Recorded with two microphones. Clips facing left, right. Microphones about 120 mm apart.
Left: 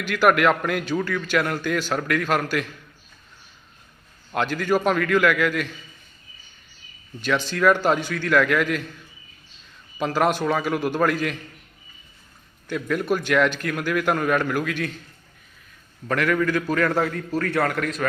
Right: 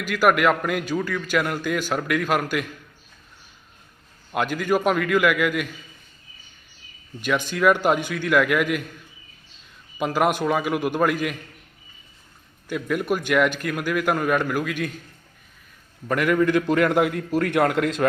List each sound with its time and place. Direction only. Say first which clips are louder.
0.0 s a man's voice: even; 5° right (ahead or behind)
4.3 s a man's voice: even; 5° right (ahead or behind)
7.2 s a man's voice: even; 15° right (ahead or behind)
10.0 s a man's voice: even; 10° right (ahead or behind)
12.6 s a man's voice: even; 10° right (ahead or behind)
16.0 s a man's voice: right 2 dB; 10° right (ahead or behind)